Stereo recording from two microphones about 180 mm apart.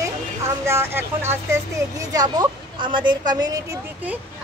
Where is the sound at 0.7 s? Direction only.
15° right (ahead or behind).